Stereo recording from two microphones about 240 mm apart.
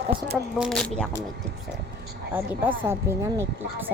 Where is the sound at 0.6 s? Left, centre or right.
Centre.